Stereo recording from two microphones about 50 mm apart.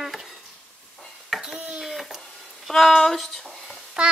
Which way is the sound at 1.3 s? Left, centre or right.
Centre.